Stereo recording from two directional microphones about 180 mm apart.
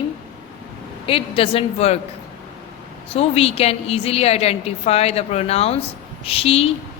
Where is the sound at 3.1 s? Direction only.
35° left (ahead or behind).